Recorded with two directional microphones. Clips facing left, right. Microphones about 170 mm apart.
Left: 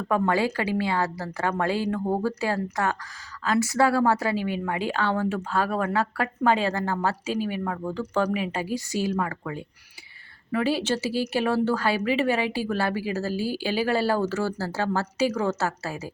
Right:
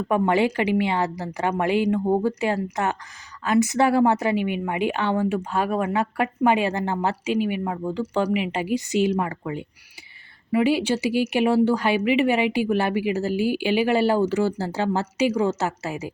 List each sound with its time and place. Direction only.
0.1 s a woman's voice: 20° right (ahead or behind)